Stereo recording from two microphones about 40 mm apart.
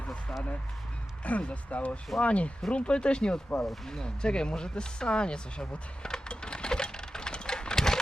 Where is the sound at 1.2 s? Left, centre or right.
Left.